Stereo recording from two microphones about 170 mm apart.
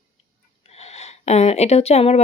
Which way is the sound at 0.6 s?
40° left (ahead or behind).